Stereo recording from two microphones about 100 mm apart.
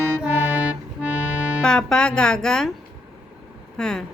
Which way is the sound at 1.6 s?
5° left (ahead or behind).